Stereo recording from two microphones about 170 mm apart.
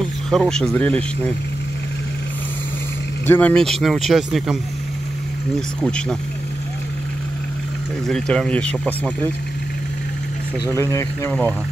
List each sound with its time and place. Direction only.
0.3 s speech: centre (ahead or behind)
3.3 s speech: 10° left (ahead or behind)
5.8 s speech: 5° left (ahead or behind)
8.1 s speech: 5° left (ahead or behind)
10.7 s speech: 20° left (ahead or behind)